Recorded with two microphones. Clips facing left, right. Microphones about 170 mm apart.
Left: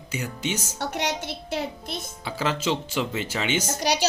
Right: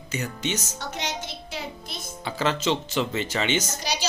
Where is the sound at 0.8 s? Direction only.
65° left (ahead or behind).